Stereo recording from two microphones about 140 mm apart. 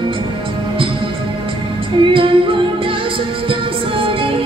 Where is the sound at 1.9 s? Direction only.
35° right (ahead or behind).